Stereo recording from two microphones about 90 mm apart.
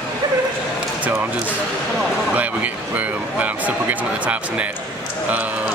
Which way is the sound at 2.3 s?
15° right (ahead or behind).